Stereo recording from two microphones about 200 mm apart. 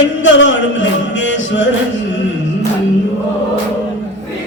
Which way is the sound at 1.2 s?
65° left (ahead or behind).